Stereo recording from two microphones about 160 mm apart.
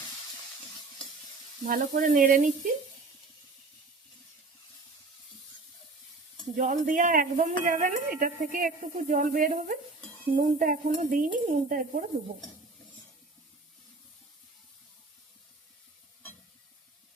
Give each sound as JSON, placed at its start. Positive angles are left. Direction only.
{"t": 1.6, "sound": "a woman's voice", "side_deg": -55}
{"t": 6.6, "sound": "a woman's voice", "side_deg": -55}